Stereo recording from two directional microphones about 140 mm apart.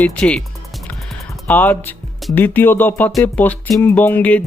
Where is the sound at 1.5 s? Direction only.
15° left (ahead or behind).